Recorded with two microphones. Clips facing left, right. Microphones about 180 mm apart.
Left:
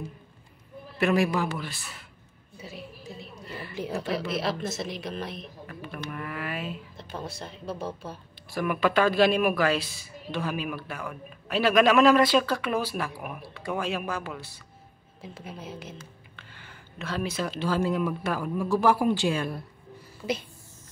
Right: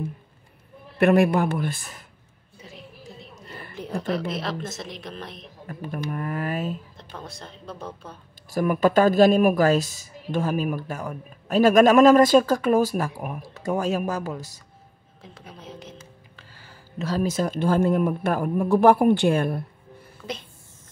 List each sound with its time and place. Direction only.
0.9 s speech: 55° right (ahead or behind)
2.6 s a sound: 5° left (ahead or behind)
3.3 s a sound: 45° right (ahead or behind)
4.3 s speech: 5° left (ahead or behind)
5.7 s speech: 45° right (ahead or behind)
7.0 s speech: 5° left (ahead or behind)
8.5 s speech: 40° right (ahead or behind)
15.2 s a woman's voice: 5° left (ahead or behind)
16.3 s speech: 40° right (ahead or behind); by 19.6 s 55° right (ahead or behind)